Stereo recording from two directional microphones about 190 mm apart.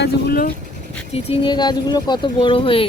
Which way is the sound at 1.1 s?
25° left (ahead or behind).